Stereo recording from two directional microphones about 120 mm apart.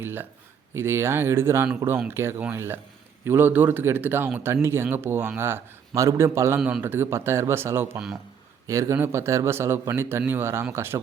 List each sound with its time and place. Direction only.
0.0 s a man's voice: 15° right (ahead or behind)